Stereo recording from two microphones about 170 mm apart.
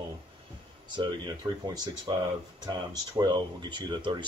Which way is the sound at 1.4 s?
25° right (ahead or behind).